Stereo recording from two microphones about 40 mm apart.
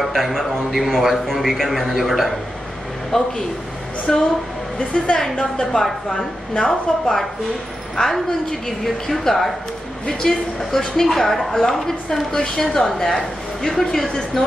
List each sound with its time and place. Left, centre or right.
0.0 s a man's voice: centre
1.1 s a woman's voice: centre
1.7 s a man's voice: centre
3.1 s a woman's voice: centre
4.7 s a woman's voice: left